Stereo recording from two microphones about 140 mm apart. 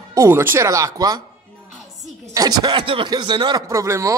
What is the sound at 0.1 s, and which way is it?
Speech, 20° right (ahead or behind).